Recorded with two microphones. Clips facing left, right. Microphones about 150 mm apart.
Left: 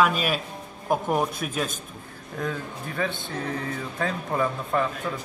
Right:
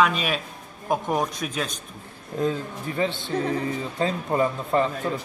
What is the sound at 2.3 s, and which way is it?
Speech, 20° right (ahead or behind).